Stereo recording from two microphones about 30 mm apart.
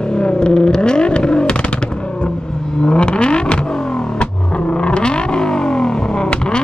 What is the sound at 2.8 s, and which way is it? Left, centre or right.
Vehicle, left.